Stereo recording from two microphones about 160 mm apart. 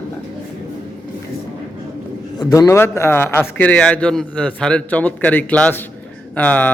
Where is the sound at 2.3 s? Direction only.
25° left (ahead or behind).